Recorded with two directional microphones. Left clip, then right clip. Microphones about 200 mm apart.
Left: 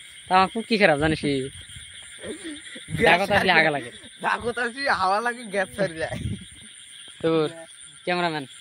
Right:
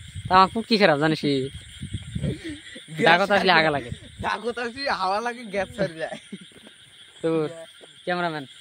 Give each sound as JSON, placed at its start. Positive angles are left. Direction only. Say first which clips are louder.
{"t": 0.3, "sound": "speech", "louder": "right 2 dB", "side_deg": -20}
{"t": 3.0, "sound": "speech", "louder": "right 1 dB", "side_deg": -25}
{"t": 3.8, "sound": "speech", "louder": "left 2 dB", "side_deg": 0}
{"t": 5.8, "sound": "speech", "louder": "left 1 dB", "side_deg": 20}
{"t": 7.2, "sound": "speech", "louder": "left 2 dB", "side_deg": 0}
{"t": 8.0, "sound": "speech", "louder": "left 1 dB", "side_deg": 15}